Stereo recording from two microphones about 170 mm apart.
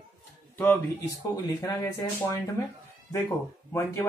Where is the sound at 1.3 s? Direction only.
20° left (ahead or behind).